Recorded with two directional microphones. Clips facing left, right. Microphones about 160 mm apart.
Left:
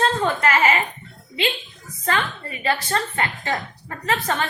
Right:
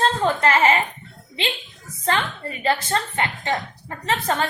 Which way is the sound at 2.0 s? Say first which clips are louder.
Right 1 dB; 30° right (ahead or behind).